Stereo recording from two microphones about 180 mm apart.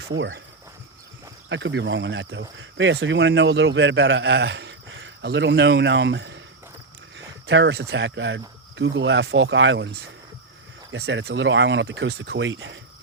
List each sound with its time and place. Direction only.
0.1 s speech: 90° right
1.5 s speech: 90° right
7.4 s speech: 80° right
10.9 s speech: 65° right (ahead or behind); by 12.8 s 90° right